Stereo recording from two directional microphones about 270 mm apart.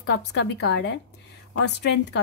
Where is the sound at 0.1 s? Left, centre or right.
Left.